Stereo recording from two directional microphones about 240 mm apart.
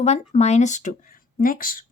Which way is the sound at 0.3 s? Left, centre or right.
Left.